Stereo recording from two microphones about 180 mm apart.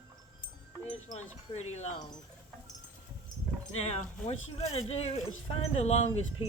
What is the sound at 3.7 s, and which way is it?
Speech, 35° left (ahead or behind).